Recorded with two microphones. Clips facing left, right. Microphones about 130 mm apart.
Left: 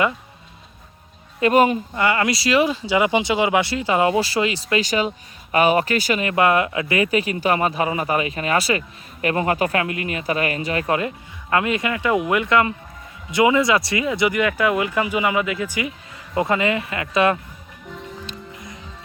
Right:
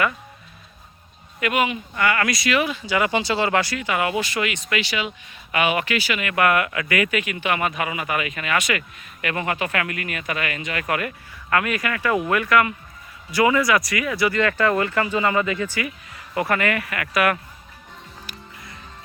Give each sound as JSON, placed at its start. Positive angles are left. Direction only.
{"t": 1.4, "sound": "speech", "side_deg": 35}
{"t": 2.0, "sound": "speech", "side_deg": 25}
{"t": 3.6, "sound": "speech", "side_deg": 25}